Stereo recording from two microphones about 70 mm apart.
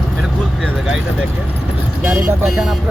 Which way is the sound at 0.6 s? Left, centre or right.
Centre.